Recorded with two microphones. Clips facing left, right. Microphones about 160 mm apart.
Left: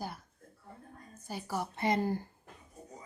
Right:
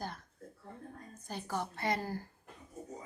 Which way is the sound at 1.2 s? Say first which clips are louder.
Left 1 dB; 10° left (ahead or behind).